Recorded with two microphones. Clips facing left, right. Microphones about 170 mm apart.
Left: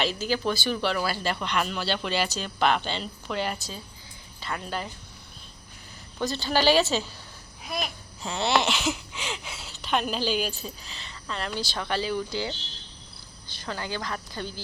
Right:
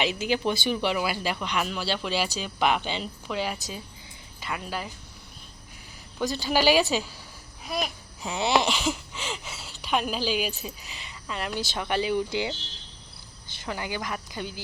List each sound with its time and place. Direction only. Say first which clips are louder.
0.0 s speech: right 1 dB; 15° right (ahead or behind)
6.1 s speech: right 1 dB; 10° right (ahead or behind)
7.8 s babbling: right 3 dB; 15° right (ahead or behind)
8.5 s speech: right 1 dB; 10° right (ahead or behind)
13.7 s speech: right 1 dB; 15° right (ahead or behind)